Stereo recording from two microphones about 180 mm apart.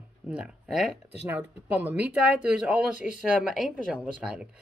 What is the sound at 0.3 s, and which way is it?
Speech, 5° right (ahead or behind).